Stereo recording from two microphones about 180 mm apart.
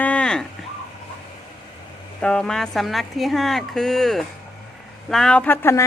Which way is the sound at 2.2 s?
5° left (ahead or behind).